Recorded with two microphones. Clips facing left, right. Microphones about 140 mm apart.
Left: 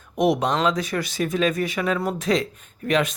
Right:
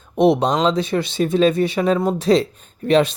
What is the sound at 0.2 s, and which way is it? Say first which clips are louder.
Speech: right 5 dB; 30° right (ahead or behind).